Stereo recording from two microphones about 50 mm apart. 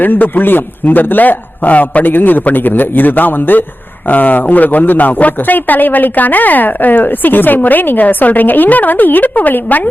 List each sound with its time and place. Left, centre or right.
0.0 s a man's voice: left